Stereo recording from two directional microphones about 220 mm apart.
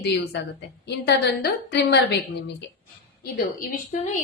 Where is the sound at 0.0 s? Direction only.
50° left (ahead or behind).